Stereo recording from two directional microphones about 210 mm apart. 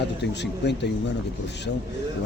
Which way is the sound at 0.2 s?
55° left (ahead or behind).